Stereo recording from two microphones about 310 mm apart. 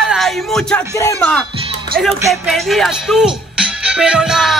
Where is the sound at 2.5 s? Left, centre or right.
Centre.